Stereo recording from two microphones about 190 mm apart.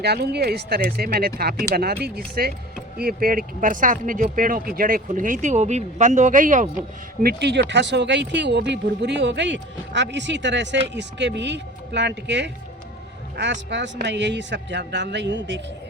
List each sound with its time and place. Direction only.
0.0 s speech: 60° right (ahead or behind); by 6.7 s 45° right (ahead or behind)
7.2 s speech: 60° right (ahead or behind)